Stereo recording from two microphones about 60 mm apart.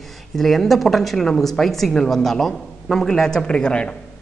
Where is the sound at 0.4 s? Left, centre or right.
Centre.